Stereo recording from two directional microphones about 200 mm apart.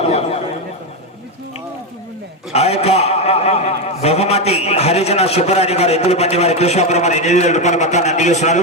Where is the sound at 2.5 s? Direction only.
30° left (ahead or behind).